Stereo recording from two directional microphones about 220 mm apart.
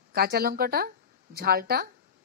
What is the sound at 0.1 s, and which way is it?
Speech, 45° right (ahead or behind).